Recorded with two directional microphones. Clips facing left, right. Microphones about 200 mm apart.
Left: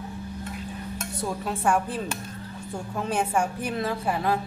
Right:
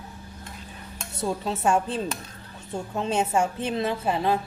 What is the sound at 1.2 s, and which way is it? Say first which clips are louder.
A woman's voice: right 2 dB; 25° right (ahead or behind).